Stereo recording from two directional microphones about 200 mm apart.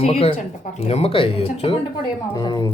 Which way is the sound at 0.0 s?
30° left (ahead or behind).